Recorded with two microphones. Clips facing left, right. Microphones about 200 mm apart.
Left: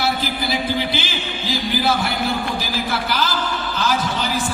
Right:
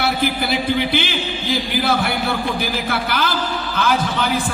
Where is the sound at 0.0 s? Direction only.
60° right (ahead or behind).